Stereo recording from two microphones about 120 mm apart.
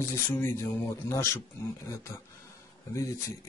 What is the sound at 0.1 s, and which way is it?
Speech, 20° left (ahead or behind).